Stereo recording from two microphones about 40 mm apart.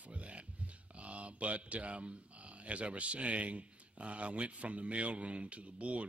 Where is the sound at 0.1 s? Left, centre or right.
Right.